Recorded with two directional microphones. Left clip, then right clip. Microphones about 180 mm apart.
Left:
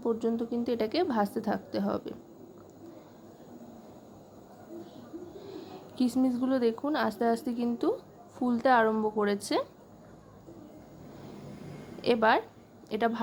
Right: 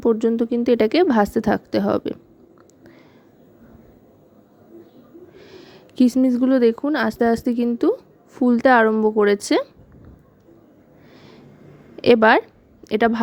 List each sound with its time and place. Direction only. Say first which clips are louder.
0.0 s a woman's voice: right 12 dB; 40° right (ahead or behind)
5.4 s a sound: right 1 dB; 40° right (ahead or behind)
6.2 s speech: right 10 dB; 35° right (ahead or behind)
12.0 s a woman's voice: right 11 dB; 40° right (ahead or behind)